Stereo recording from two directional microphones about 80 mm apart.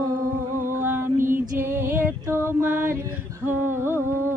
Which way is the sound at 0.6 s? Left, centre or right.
Right.